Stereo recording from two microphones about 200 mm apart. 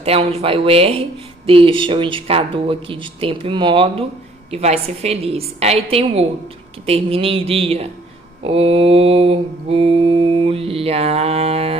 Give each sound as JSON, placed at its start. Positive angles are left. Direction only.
{"t": 0.0, "sound": "mantra", "side_deg": -30}
{"t": 4.5, "sound": "a woman's voice", "side_deg": -30}
{"t": 6.8, "sound": "mantra", "side_deg": -30}